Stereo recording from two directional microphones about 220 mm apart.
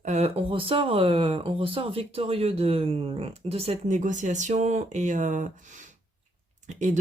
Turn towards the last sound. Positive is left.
turn(degrees=-35)  # may be behind; listen again after turning